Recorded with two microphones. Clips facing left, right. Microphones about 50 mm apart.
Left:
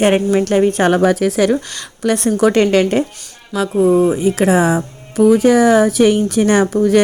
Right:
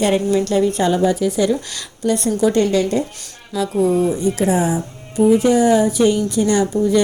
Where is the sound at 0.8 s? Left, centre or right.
Left.